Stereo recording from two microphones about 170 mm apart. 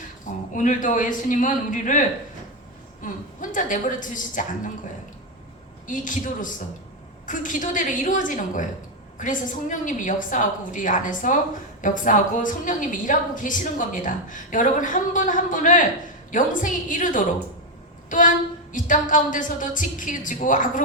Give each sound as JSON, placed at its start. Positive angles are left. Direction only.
{"t": 0.3, "sound": "a woman's voice", "side_deg": 50}
{"t": 5.8, "sound": "a woman's voice", "side_deg": 50}
{"t": 18.7, "sound": "a woman's voice", "side_deg": 50}